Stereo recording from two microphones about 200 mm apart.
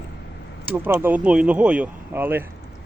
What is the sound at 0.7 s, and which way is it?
Speech, 10° right (ahead or behind).